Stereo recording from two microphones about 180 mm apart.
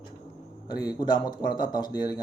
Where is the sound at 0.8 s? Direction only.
25° left (ahead or behind).